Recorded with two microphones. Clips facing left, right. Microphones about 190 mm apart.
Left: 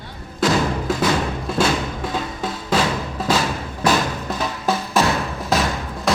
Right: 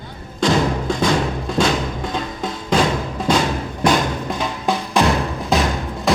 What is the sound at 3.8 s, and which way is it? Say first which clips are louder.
Music: right 2 dB; 5° left (ahead or behind).